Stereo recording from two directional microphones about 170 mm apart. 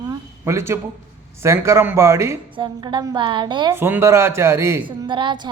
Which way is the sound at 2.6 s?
25° right (ahead or behind).